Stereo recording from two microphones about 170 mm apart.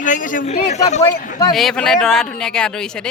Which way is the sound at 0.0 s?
50° left (ahead or behind).